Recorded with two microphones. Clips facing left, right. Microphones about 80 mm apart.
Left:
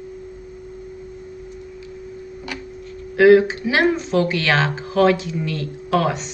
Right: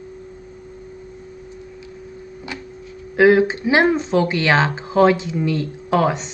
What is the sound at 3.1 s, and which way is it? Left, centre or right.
Speech, right.